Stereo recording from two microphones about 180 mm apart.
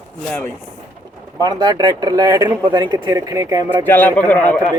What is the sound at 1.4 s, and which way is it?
Speech, 20° right (ahead or behind).